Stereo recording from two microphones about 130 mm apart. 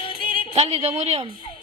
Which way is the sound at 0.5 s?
50° right (ahead or behind).